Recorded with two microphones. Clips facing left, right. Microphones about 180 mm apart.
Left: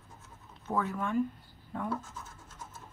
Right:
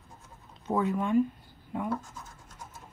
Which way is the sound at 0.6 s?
15° right (ahead or behind).